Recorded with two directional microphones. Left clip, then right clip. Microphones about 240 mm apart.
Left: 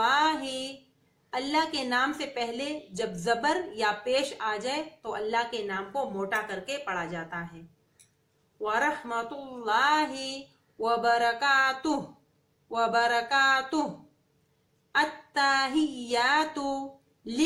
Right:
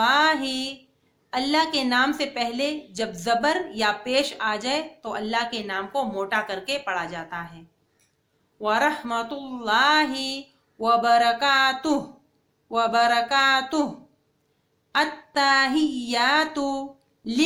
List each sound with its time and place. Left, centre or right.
0.0 s a sound: right
1.3 s a woman's voice: right
8.6 s a woman's voice: right
14.9 s a woman's voice: right